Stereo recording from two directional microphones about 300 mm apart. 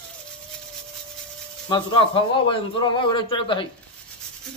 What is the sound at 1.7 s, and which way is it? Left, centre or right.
Speech, centre.